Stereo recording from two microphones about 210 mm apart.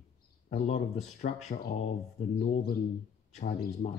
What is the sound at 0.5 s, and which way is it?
Speech, 35° left (ahead or behind).